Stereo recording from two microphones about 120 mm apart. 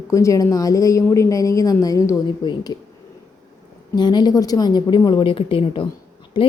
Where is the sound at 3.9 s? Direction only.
35° left (ahead or behind).